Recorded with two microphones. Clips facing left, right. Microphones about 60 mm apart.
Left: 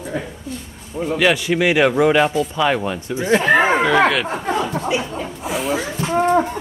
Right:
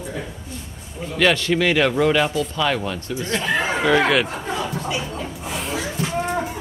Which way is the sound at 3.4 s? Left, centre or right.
Left.